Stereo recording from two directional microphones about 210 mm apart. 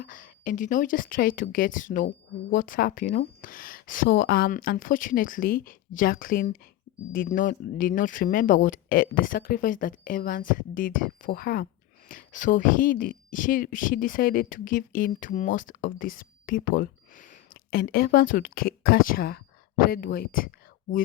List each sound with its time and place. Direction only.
0.0 s speech: 40° left (ahead or behind)